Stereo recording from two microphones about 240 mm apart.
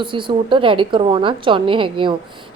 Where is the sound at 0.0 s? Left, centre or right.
Centre.